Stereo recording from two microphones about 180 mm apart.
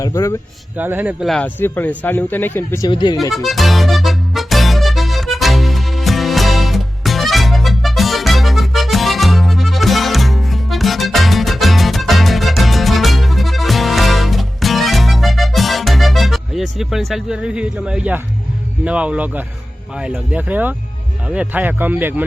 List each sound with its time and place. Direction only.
0.0 s speech: 15° left (ahead or behind)
0.8 s speech: 10° right (ahead or behind); by 2.9 s 15° left (ahead or behind)
2.9 s speech: 25° left (ahead or behind)
3.3 s music: centre (ahead or behind)
18.9 s speech: 5° right (ahead or behind)